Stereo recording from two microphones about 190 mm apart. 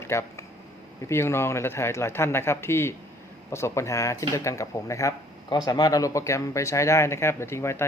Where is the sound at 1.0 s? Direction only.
15° left (ahead or behind).